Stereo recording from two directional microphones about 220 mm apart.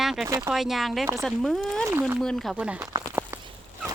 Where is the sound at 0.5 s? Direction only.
Centre (ahead or behind).